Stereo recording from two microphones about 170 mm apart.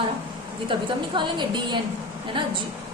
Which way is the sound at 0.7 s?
30° right (ahead or behind).